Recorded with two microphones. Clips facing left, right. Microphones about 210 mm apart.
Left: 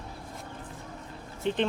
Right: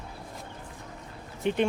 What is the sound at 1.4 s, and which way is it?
Speech, 15° right (ahead or behind).